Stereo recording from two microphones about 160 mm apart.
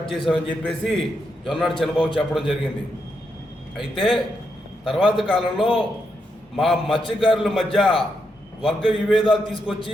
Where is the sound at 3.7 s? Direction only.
Centre (ahead or behind).